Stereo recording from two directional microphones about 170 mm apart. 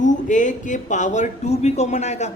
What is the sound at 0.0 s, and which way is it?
A man's voice, 50° left (ahead or behind).